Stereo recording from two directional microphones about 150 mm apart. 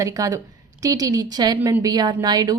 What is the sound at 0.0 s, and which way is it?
A woman's voice, 20° right (ahead or behind).